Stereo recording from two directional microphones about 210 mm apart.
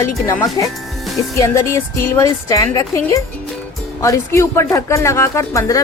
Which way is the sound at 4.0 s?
15° left (ahead or behind).